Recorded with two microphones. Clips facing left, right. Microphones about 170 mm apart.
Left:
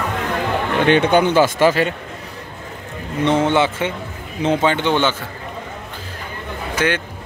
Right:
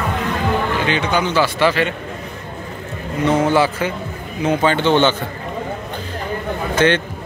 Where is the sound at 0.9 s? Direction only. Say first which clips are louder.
Left 5 dB; 55° left (ahead or behind).